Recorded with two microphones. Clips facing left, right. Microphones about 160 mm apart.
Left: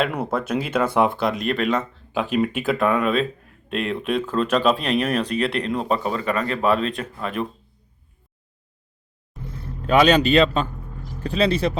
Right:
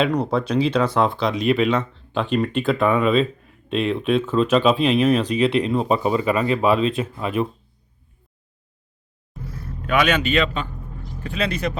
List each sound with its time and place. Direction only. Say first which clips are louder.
0.0 s speech: right 3 dB; 5° left (ahead or behind)
9.6 s a man's voice: left 3 dB; 30° left (ahead or behind)